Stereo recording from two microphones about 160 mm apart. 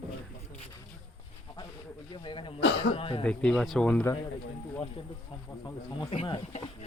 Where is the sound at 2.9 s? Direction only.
35° left (ahead or behind).